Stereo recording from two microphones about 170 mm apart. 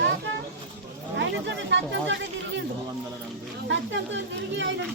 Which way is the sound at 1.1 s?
90° right.